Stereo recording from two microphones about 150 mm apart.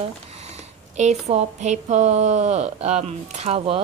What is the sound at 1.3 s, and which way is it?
A woman's voice, 50° right (ahead or behind).